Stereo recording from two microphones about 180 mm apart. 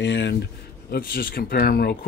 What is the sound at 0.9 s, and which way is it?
Speech, 55° left (ahead or behind).